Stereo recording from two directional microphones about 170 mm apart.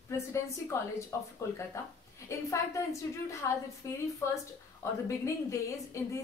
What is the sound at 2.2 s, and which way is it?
A woman's voice, 20° left (ahead or behind).